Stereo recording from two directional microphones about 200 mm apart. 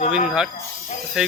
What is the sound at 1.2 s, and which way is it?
Speech, 5° right (ahead or behind).